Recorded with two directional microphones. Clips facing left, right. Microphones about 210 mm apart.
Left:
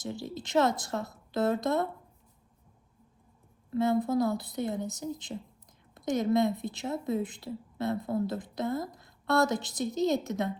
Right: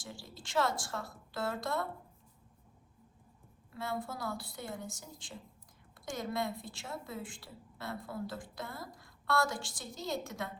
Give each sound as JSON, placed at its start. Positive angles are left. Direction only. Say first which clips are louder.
{"t": 0.0, "sound": "a woman's voice", "louder": "left 12 dB", "side_deg": 20}
{"t": 3.8, "sound": "a woman's voice", "louder": "left 13 dB", "side_deg": 20}